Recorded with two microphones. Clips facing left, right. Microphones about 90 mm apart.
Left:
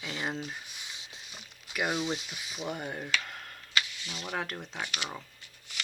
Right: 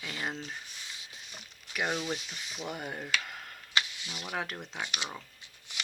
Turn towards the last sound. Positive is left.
turn(degrees=-20)  # may be behind; listen again after turning